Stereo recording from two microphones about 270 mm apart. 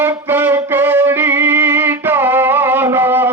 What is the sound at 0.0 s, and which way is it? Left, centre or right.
Music, centre.